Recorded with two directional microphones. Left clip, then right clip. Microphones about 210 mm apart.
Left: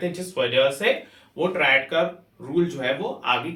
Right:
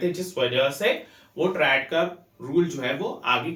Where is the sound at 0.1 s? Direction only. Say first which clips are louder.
Left 1 dB; 15° left (ahead or behind).